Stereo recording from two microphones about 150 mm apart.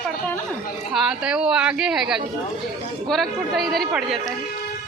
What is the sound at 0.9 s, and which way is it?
A woman's voice, 5° right (ahead or behind).